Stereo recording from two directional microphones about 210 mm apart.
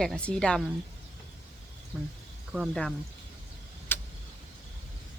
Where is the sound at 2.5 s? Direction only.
Centre (ahead or behind).